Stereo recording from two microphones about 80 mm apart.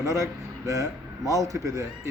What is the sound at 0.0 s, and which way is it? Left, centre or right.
A man's voice, right.